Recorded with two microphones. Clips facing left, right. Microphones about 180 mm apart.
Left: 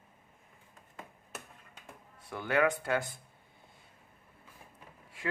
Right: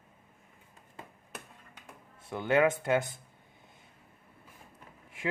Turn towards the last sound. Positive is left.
turn(degrees=-20)  # may be behind; listen again after turning